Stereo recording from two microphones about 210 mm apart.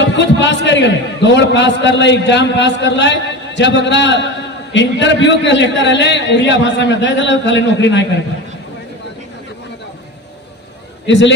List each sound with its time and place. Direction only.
0.0 s a sound: 60° left (ahead or behind)
0.7 s a man's voice: 55° left (ahead or behind)
11.1 s a man's voice: 60° left (ahead or behind)